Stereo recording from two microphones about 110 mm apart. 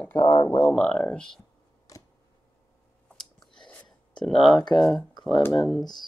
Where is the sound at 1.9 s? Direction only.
30° left (ahead or behind).